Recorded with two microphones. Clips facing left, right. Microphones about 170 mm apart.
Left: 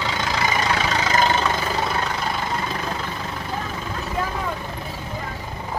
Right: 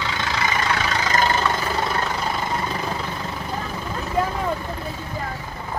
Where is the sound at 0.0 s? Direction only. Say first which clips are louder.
Left 1 dB; 30° left (ahead or behind).